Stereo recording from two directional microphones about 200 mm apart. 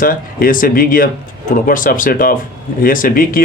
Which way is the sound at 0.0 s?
45° left (ahead or behind).